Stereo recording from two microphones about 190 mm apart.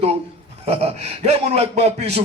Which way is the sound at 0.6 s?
30° right (ahead or behind).